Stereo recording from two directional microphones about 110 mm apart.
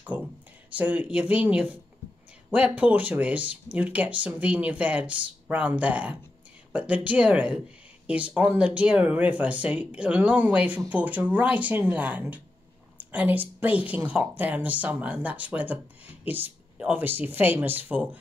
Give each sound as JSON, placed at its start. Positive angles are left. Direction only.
{"t": 0.1, "sound": "a woman's voice", "side_deg": -15}